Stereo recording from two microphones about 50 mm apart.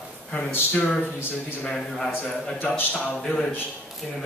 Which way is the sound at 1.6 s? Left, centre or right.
Centre.